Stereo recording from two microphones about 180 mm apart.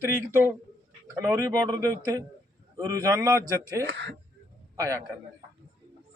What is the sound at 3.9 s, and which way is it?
Speech, 75° right (ahead or behind).